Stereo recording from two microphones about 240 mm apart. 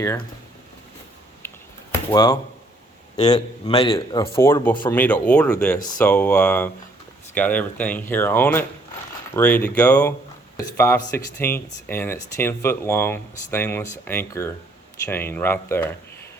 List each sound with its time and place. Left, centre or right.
1.4 s finger snapping: centre
1.9 s a sound: centre
3.3 s a man's voice: left
4.4 s speech: centre